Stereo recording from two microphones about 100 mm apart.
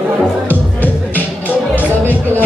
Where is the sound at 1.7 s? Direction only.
20° left (ahead or behind).